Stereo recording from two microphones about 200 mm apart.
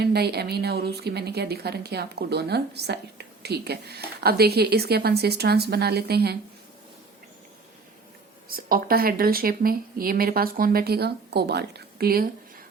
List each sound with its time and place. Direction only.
0.0 s speech: 55° right (ahead or behind)
8.4 s speech: 45° right (ahead or behind)